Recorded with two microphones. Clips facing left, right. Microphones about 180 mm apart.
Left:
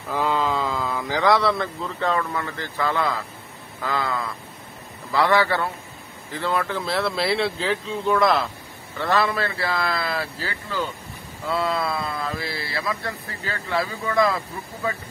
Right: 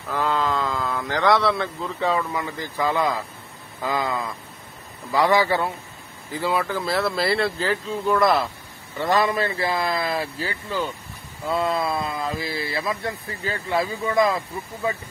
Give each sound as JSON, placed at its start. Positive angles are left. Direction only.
{"t": 0.1, "sound": "a man's voice", "side_deg": 10}
{"t": 8.9, "sound": "a man's voice", "side_deg": -15}